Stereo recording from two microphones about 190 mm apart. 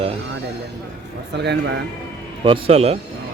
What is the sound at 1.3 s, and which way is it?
Speech, 65° right (ahead or behind).